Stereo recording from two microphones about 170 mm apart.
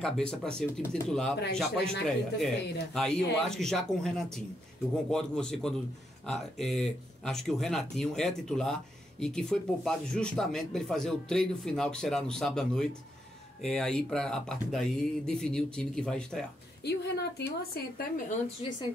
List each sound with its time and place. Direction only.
0.0 s speech: 5° left (ahead or behind)
16.8 s a woman's voice: 75° left (ahead or behind)
18.6 s speech: 35° left (ahead or behind)